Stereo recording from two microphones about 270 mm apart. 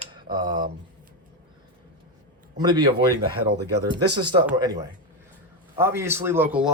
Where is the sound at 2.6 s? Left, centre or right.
Centre.